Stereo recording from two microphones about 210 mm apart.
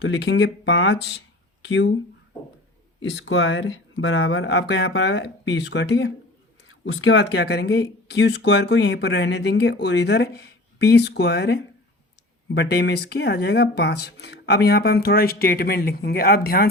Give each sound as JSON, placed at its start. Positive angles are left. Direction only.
{"t": 0.0, "sound": "speech", "side_deg": 60}
{"t": 3.0, "sound": "speech", "side_deg": 65}
{"t": 6.7, "sound": "speech", "side_deg": 75}